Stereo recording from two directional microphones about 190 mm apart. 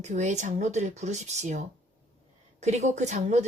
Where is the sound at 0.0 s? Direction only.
40° right (ahead or behind).